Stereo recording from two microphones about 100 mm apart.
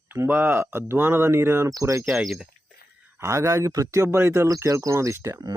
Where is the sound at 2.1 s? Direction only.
Centre (ahead or behind).